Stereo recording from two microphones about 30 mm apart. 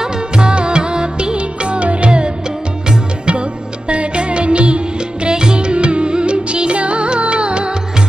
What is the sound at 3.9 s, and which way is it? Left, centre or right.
Music, right.